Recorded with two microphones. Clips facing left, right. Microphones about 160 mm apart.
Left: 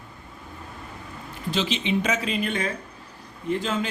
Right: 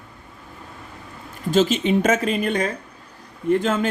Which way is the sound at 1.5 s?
45° right (ahead or behind).